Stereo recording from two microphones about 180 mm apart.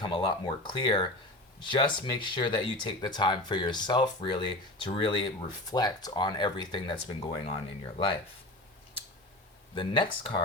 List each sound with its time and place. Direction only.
0.0 s speech: 25° left (ahead or behind)
9.7 s speech: 25° left (ahead or behind)